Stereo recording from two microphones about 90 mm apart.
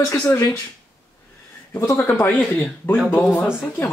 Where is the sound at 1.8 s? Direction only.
35° left (ahead or behind).